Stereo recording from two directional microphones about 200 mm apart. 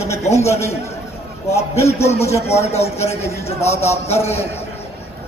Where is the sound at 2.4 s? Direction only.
30° left (ahead or behind).